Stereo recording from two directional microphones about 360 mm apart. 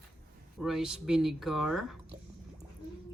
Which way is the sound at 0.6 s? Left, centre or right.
Centre.